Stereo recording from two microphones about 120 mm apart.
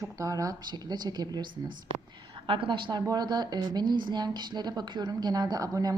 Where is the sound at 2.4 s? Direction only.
45° right (ahead or behind).